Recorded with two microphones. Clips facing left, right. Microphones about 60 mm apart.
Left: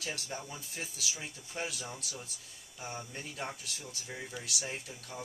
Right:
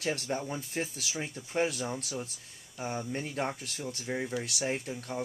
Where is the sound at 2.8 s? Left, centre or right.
Right.